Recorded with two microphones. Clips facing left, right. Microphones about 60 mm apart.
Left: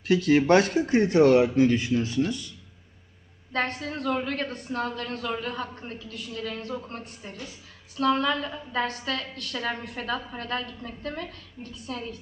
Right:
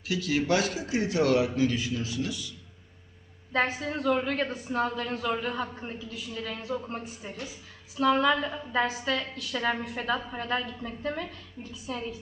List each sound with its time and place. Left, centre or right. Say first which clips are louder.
0.1 s speech: left 7 dB; left
3.5 s a woman's voice: right 1 dB; centre